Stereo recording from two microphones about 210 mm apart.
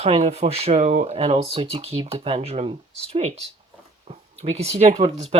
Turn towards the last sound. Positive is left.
turn(degrees=-30)  # may be behind; listen again after turning